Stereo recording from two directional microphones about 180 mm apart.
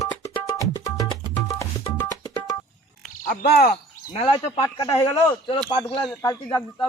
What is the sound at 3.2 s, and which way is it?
Speech, 55° left (ahead or behind).